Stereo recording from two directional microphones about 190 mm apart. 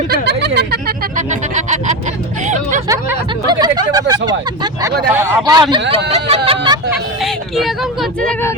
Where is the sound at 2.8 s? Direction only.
20° right (ahead or behind).